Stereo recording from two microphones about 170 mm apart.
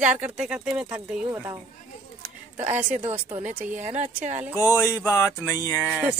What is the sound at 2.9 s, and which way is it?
Speech, 35° right (ahead or behind).